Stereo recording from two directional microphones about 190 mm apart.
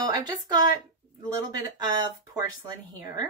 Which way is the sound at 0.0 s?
20° right (ahead or behind).